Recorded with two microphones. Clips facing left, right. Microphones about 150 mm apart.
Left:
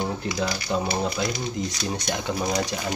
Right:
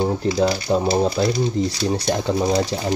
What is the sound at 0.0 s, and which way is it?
Speech, 35° right (ahead or behind).